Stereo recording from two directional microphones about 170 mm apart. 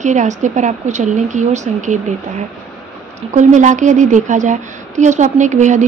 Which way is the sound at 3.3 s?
45° right (ahead or behind).